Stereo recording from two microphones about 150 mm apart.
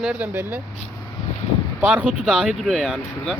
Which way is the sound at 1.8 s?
10° right (ahead or behind).